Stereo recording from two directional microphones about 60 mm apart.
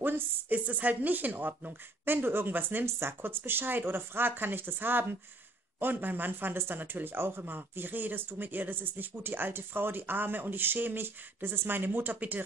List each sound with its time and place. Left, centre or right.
0.0 s speech: right